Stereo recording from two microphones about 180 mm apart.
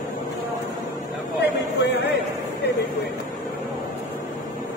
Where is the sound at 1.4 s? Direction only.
70° left (ahead or behind).